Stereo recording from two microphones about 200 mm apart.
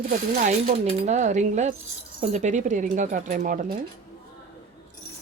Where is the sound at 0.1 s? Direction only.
35° right (ahead or behind).